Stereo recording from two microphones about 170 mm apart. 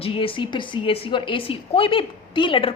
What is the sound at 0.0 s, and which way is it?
A woman's voice, 30° left (ahead or behind).